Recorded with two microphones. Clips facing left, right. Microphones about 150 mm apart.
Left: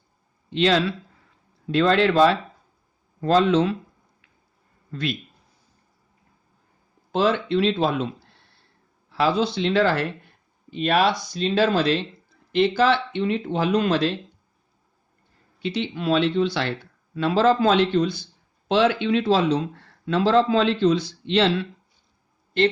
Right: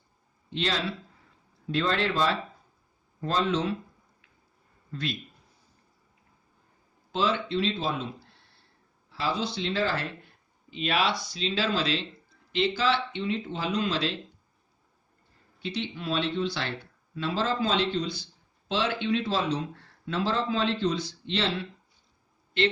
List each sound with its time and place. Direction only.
0.5 s speech: 75° left (ahead or behind)
7.1 s speech: 55° left (ahead or behind)
9.1 s speech: 65° left (ahead or behind)
10.7 s speech: 45° left (ahead or behind)
15.6 s speech: 75° left (ahead or behind); by 18.3 s 55° left (ahead or behind)
18.7 s speech: 70° left (ahead or behind)